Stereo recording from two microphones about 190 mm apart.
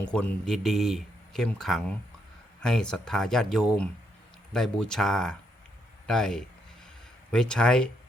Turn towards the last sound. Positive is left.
turn(degrees=5)  # may be behind; listen again after turning